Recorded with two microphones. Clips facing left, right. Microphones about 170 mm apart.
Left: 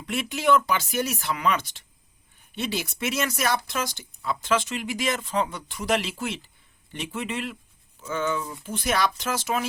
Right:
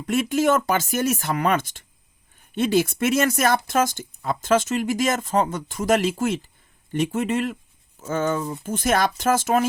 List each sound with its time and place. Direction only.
0.0 s speech: 45° right (ahead or behind)